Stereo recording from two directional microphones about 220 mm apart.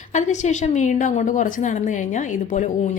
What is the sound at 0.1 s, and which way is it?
A woman's voice, 35° left (ahead or behind).